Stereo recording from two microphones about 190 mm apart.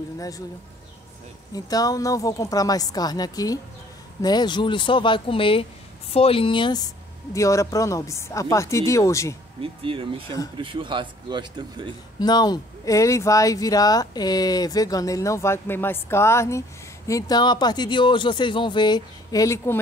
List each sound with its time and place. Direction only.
1.5 s speech: 20° left (ahead or behind)
9.6 s speech: 30° right (ahead or behind)
12.2 s speech: 20° left (ahead or behind)